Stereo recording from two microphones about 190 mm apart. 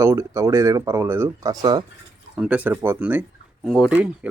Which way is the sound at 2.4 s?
5° right (ahead or behind).